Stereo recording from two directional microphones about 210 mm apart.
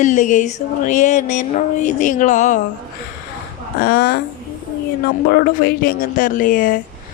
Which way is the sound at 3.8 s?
45° left (ahead or behind).